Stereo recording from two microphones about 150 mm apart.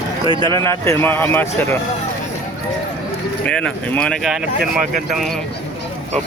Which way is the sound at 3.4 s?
10° left (ahead or behind).